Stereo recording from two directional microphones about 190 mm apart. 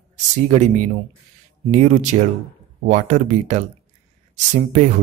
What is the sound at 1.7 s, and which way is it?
Speech, 40° right (ahead or behind).